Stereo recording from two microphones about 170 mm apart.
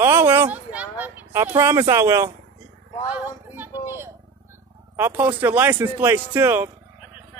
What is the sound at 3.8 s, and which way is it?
Speech, 15° right (ahead or behind).